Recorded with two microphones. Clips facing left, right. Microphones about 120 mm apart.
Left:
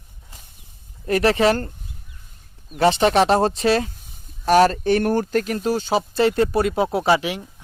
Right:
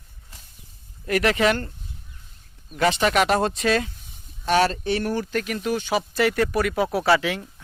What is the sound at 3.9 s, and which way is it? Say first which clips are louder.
Speech: left 1 dB; 45° left (ahead or behind).